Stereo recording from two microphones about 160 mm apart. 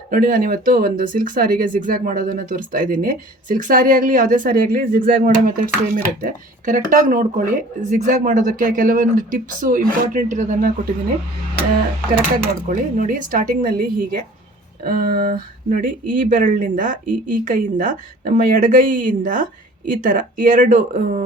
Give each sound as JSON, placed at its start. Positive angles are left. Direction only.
{"t": 0.1, "sound": "speech", "side_deg": -60}
{"t": 12.6, "sound": "speech", "side_deg": -60}